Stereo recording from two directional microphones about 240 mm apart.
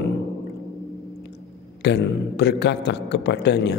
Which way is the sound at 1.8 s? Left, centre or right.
Left.